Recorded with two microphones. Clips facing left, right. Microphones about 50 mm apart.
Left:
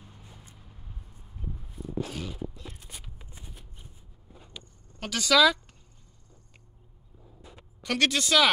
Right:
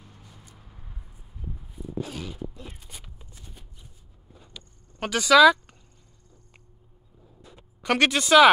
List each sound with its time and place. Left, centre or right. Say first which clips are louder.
0.2 s vehicle: right 1 dB; left
1.7 s a sound: right 1 dB; centre
4.6 s vehicle: even; centre
5.0 s speech: right 6 dB; centre
7.8 s speech: right 4 dB; right